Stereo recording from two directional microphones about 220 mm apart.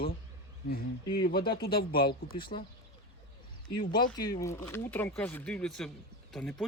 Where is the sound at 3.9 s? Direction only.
20° left (ahead or behind); by 6.7 s 5° left (ahead or behind).